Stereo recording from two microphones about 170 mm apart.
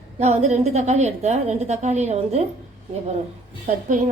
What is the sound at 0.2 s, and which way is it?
A woman's voice, 40° right (ahead or behind).